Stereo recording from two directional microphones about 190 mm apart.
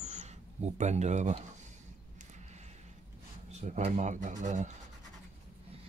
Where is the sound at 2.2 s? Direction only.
35° right (ahead or behind).